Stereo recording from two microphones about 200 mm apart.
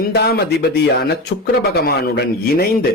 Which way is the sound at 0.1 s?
55° left (ahead or behind).